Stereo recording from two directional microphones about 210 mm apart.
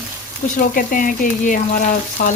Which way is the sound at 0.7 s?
40° left (ahead or behind).